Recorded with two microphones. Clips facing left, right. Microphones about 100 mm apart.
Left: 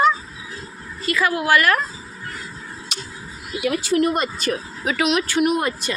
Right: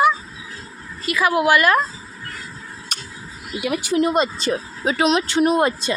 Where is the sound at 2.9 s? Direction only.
45° right (ahead or behind).